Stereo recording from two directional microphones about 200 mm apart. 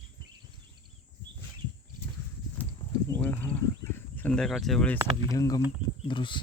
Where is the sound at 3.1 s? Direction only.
10° left (ahead or behind).